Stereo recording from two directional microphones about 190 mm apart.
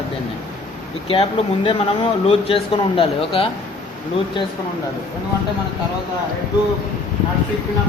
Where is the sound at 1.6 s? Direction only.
30° left (ahead or behind).